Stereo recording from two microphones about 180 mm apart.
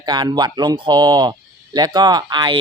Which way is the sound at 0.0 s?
25° right (ahead or behind).